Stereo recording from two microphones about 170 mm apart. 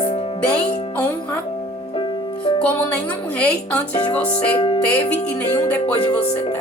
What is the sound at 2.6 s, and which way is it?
Speech, 10° left (ahead or behind).